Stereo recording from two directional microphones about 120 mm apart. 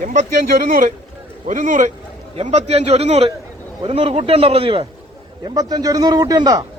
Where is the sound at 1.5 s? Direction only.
90° right.